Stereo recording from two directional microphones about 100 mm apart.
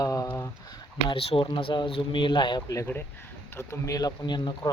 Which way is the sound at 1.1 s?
65° left (ahead or behind).